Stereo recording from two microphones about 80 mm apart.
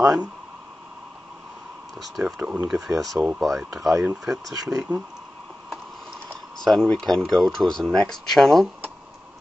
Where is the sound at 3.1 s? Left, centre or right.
Centre.